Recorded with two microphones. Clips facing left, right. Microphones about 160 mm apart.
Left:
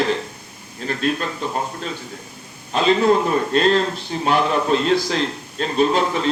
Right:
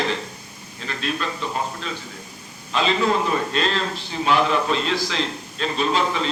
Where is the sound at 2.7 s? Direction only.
45° left (ahead or behind).